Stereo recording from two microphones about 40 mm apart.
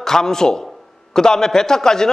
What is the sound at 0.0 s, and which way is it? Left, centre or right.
A man's voice, centre.